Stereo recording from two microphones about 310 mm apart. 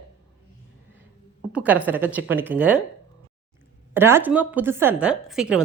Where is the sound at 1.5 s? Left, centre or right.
Centre.